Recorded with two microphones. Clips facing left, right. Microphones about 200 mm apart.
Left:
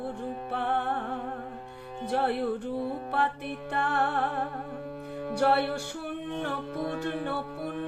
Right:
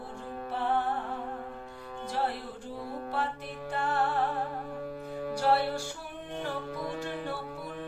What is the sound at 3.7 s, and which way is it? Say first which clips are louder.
Music: left 1 dB; 60° left (ahead or behind).